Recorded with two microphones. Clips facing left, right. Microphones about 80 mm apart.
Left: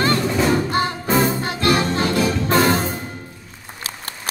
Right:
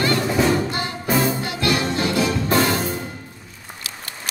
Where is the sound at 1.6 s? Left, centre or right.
Left.